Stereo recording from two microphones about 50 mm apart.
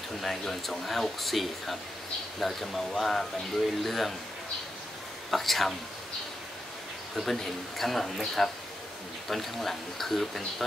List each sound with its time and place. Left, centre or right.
0.2 s speech: centre
5.3 s speech: centre
7.2 s speech: centre